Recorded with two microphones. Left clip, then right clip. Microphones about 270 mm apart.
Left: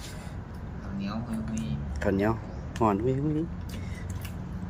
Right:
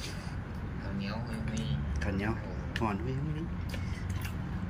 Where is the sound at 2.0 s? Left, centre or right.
Centre.